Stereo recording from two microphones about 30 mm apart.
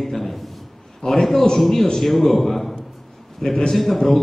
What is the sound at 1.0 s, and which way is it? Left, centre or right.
Speech, left.